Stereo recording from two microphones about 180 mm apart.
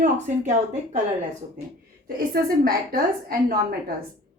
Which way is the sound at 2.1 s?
55° right (ahead or behind).